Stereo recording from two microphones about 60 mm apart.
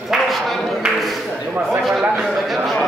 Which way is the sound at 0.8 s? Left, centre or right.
Centre.